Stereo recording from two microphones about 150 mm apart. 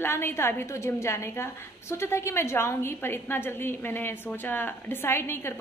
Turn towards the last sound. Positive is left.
turn(degrees=15)  # may be behind; listen again after turning